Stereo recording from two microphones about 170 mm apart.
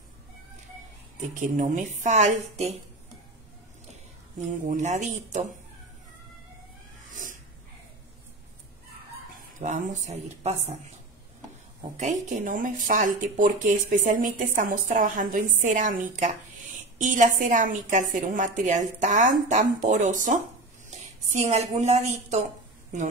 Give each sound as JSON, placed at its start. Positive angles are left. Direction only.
{"t": 1.4, "sound": "speech", "side_deg": -50}
{"t": 4.6, "sound": "speech", "side_deg": -45}
{"t": 7.1, "sound": "cat", "side_deg": -50}
{"t": 9.6, "sound": "speech", "side_deg": -50}
{"t": 12.0, "sound": "a woman's voice", "side_deg": -45}